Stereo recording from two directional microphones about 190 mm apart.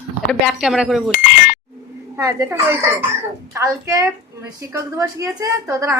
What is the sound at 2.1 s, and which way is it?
A woman's voice, 15° right (ahead or behind).